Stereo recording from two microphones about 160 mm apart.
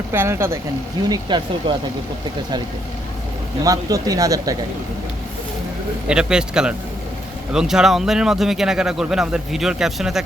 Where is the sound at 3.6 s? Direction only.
20° right (ahead or behind).